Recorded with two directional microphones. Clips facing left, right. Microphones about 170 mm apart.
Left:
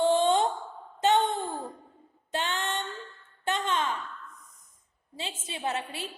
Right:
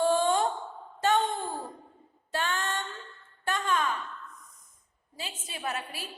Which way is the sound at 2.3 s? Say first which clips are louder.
Even; 20° left (ahead or behind).